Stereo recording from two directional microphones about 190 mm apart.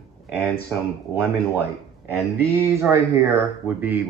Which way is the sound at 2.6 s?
15° right (ahead or behind).